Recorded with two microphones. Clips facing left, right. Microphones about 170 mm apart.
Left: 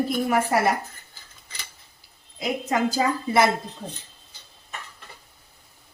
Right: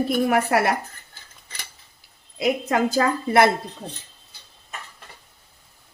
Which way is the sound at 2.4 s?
60° right (ahead or behind).